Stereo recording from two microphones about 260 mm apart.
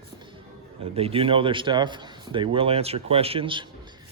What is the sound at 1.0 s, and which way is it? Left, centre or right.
A man's voice, right.